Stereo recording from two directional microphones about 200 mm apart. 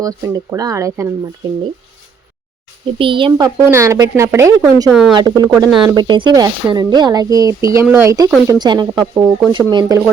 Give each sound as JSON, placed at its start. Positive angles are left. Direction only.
{"t": 0.0, "sound": "a woman's voice", "side_deg": -15}
{"t": 3.0, "sound": "a woman's voice", "side_deg": -25}
{"t": 4.9, "sound": "speech", "side_deg": -5}
{"t": 5.1, "sound": "speech", "side_deg": -20}